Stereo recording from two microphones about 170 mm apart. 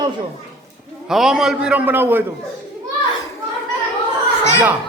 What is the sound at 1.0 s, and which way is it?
A man's voice, 5° right (ahead or behind).